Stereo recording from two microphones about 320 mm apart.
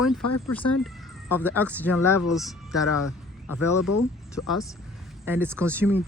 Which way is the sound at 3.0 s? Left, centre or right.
Left.